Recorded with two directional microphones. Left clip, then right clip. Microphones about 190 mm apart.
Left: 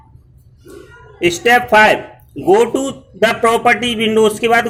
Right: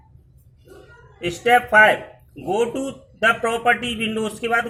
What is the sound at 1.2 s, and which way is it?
A man's voice, 30° left (ahead or behind).